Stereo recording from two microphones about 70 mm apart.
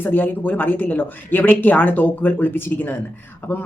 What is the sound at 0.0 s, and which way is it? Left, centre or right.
A woman's voice, left.